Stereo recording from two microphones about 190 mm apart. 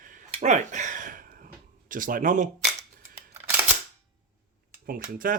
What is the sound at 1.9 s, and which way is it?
Speech, 45° right (ahead or behind).